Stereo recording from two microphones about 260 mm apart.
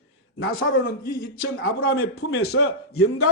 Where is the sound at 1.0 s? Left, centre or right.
Left.